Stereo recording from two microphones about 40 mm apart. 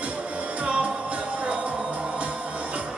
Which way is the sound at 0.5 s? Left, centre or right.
Right.